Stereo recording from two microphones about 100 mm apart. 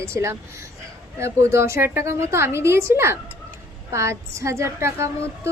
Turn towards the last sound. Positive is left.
turn(degrees=-30)  # may be behind; listen again after turning